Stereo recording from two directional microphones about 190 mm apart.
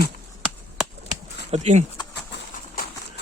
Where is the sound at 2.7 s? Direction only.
50° left (ahead or behind).